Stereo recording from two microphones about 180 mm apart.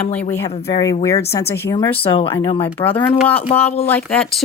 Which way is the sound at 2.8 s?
10° left (ahead or behind).